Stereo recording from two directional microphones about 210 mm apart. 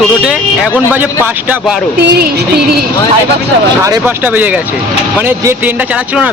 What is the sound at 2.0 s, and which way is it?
Speech, 50° right (ahead or behind).